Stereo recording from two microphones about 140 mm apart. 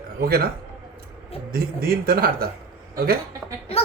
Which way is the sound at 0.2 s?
90° right.